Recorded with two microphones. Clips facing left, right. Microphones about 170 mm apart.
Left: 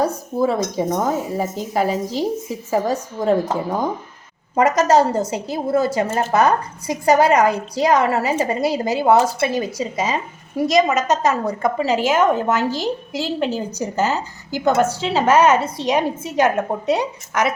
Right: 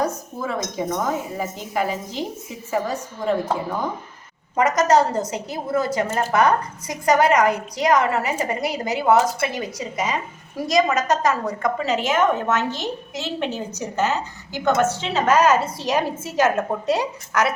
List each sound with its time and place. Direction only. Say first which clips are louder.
0.0 s a woman's voice: left 6 dB; 35° left (ahead or behind)
4.5 s a woman's voice: left 2 dB; 30° left (ahead or behind)